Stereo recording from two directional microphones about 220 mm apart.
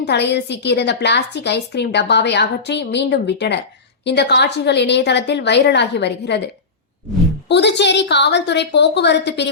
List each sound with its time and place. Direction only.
0.0 s a woman's voice: 50° left (ahead or behind)